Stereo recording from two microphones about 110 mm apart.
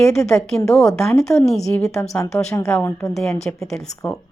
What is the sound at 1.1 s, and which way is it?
Speech, 30° left (ahead or behind).